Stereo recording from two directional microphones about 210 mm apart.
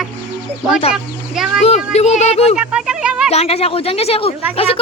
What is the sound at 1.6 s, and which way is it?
Speech, 30° left (ahead or behind).